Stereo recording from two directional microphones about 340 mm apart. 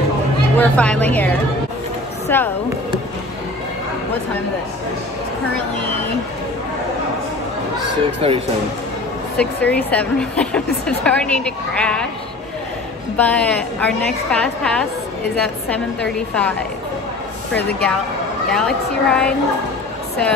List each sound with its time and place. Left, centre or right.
0.6 s a woman's voice: centre
8.0 s speech: centre
9.4 s a woman's voice: centre
13.2 s a woman's voice: centre
18.5 s a woman's voice: centre